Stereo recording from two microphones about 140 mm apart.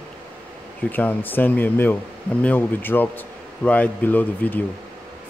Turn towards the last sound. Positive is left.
turn(degrees=10)  # may be behind; listen again after turning